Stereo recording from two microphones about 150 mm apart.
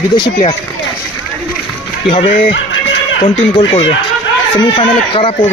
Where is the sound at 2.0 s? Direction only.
35° left (ahead or behind).